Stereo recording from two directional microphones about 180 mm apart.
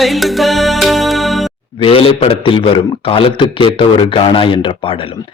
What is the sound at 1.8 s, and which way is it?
A man's voice, 30° left (ahead or behind).